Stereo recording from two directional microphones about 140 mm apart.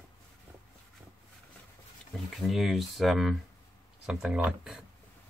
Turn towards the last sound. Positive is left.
turn(degrees=-5)  # may be behind; listen again after turning